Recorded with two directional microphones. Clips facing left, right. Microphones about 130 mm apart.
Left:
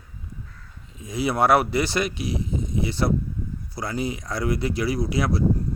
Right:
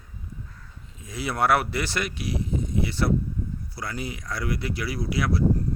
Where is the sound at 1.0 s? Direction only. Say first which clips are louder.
Left 4 dB; 15° left (ahead or behind).